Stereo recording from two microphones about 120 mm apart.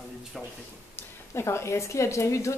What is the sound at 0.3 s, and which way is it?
Speech, centre (ahead or behind).